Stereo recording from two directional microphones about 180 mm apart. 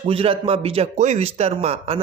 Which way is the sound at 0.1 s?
30° right (ahead or behind).